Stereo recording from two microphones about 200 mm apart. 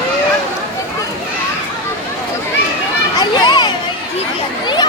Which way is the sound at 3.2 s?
20° left (ahead or behind).